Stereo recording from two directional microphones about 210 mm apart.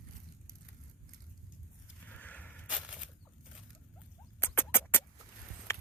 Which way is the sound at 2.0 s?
5° left (ahead or behind).